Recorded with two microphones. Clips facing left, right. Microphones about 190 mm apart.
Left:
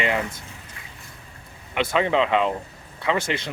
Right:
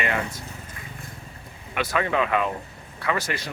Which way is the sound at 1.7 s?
20° left (ahead or behind).